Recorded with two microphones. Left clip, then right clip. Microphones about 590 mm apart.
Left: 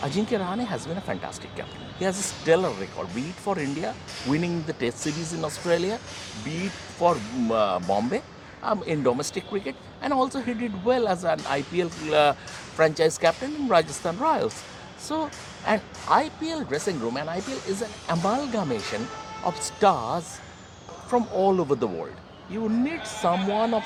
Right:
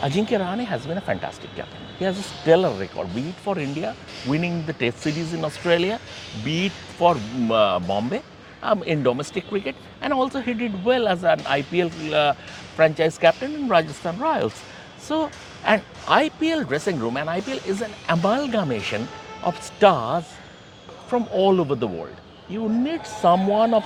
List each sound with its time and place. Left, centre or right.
0.0 s speech: centre